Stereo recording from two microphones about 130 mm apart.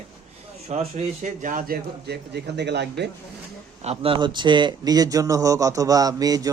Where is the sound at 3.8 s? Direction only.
50° right (ahead or behind).